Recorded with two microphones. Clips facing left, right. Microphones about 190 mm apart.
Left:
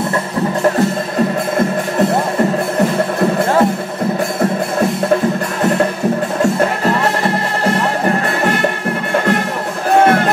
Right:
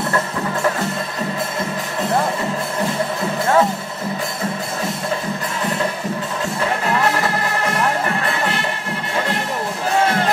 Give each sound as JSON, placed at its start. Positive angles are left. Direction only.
{"t": 9.9, "sound": "music", "side_deg": 55}